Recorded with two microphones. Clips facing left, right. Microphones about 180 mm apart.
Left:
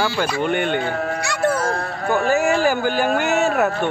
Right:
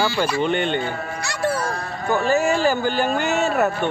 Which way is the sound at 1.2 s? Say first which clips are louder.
Left 1 dB; 50° left (ahead or behind).